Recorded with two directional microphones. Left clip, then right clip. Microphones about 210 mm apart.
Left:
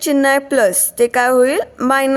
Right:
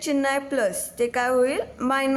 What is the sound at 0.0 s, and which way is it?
A woman's voice, 35° left (ahead or behind).